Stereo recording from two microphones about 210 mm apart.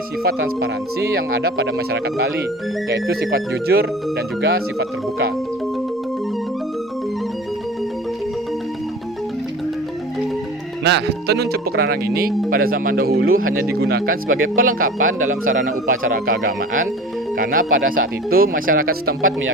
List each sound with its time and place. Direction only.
1.1 s speech: 50° right (ahead or behind)
10.8 s speech: 55° right (ahead or behind)
13.2 s a man's voice: 80° right
13.7 s speech: 50° right (ahead or behind)
14.7 s a man's voice: 85° right
15.0 s speech: 40° right (ahead or behind)